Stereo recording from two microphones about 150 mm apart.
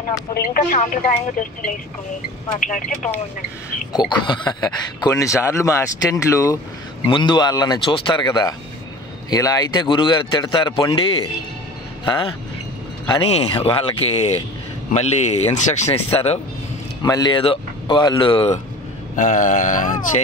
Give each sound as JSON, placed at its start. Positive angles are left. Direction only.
{"t": 0.3, "sound": "speech", "side_deg": 75}
{"t": 3.9, "sound": "speech", "side_deg": 30}
{"t": 7.1, "sound": "speech", "side_deg": 30}
{"t": 17.0, "sound": "speech", "side_deg": 25}
{"t": 19.1, "sound": "speech", "side_deg": 55}